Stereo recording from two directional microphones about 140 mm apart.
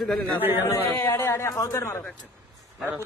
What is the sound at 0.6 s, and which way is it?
A man's voice, 20° left (ahead or behind).